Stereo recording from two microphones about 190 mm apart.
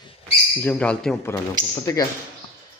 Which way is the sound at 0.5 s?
10° left (ahead or behind).